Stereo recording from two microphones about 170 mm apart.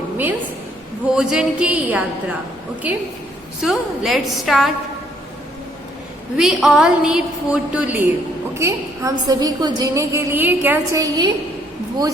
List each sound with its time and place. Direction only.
1.1 s a sound: 5° right (ahead or behind)
3.6 s a woman's voice: centre (ahead or behind)
6.3 s a woman's voice: centre (ahead or behind)
8.5 s a woman's voice: 20° right (ahead or behind)